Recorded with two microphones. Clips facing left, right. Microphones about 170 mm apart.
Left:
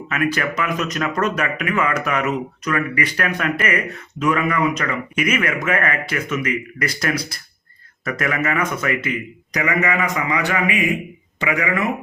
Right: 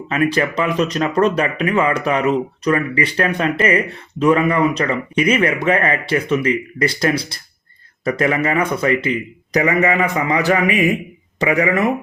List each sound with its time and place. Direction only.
0.1 s speech: 30° right (ahead or behind)